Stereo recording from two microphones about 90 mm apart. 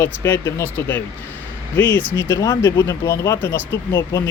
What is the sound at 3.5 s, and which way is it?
Speech, 25° left (ahead or behind).